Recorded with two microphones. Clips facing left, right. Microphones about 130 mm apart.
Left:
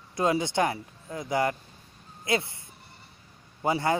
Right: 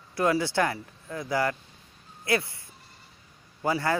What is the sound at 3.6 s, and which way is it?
Speech, 20° left (ahead or behind).